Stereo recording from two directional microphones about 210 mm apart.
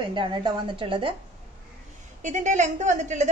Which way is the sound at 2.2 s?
35° right (ahead or behind).